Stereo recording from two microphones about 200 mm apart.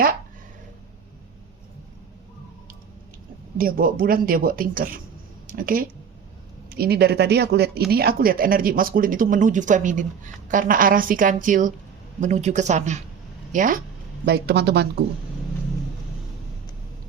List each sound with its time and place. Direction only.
3.6 s speech: 45° right (ahead or behind)
14.3 s speech: 55° right (ahead or behind)